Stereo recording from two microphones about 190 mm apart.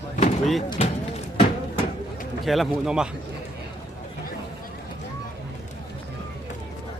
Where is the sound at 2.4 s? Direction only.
Centre (ahead or behind).